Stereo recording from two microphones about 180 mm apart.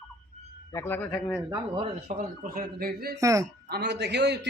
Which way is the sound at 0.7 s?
10° left (ahead or behind).